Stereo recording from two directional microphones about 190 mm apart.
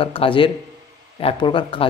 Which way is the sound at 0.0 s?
30° left (ahead or behind).